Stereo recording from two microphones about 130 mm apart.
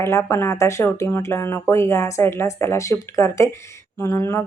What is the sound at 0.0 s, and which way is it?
A woman's voice, 20° left (ahead or behind).